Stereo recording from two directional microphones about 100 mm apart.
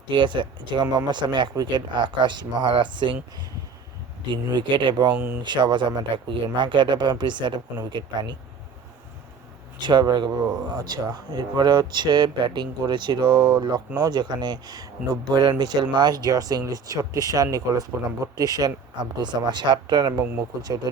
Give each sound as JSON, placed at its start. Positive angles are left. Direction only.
{"t": 0.1, "sound": "speech", "side_deg": -50}
{"t": 4.3, "sound": "speech", "side_deg": -50}
{"t": 5.1, "sound": "speech", "side_deg": -20}
{"t": 5.4, "sound": "speech", "side_deg": -50}
{"t": 9.8, "sound": "speech", "side_deg": -45}